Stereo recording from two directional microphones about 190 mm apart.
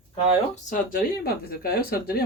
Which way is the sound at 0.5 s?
45° left (ahead or behind).